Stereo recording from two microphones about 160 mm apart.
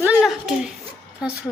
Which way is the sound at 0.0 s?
5° right (ahead or behind).